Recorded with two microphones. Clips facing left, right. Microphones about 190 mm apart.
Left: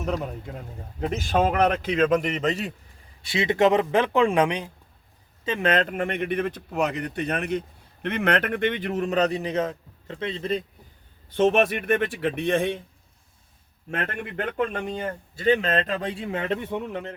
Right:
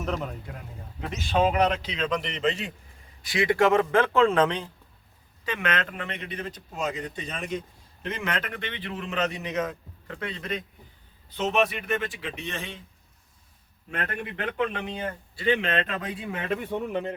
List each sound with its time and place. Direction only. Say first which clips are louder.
0.0 s a man's voice: left 2 dB; 10° left (ahead or behind)
1.3 s a man's voice: left 1 dB; 50° left (ahead or behind)
3.2 s speech: left 2 dB; 25° left (ahead or behind)
5.5 s a man's voice: left 6 dB; 35° left (ahead or behind)
11.3 s speech: left 5 dB; 55° left (ahead or behind)
13.9 s a man's voice: left 3 dB; 45° left (ahead or behind); by 16.6 s 25° left (ahead or behind)
16.9 s a man's voice: right 3 dB; 15° right (ahead or behind)